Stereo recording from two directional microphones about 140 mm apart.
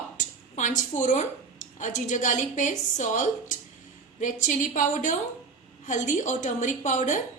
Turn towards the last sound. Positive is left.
turn(degrees=60)  # may be behind; listen again after turning